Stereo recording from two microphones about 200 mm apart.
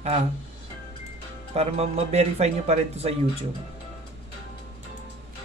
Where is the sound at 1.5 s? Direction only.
30° right (ahead or behind).